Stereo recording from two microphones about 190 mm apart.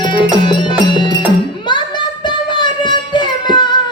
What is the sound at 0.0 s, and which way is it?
Music, 25° left (ahead or behind).